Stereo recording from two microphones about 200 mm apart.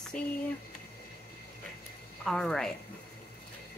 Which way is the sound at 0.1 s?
5° left (ahead or behind).